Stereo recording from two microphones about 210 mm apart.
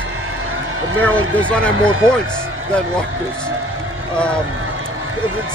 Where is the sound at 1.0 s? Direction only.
5° left (ahead or behind).